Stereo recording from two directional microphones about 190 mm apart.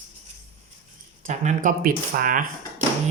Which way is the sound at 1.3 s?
40° right (ahead or behind).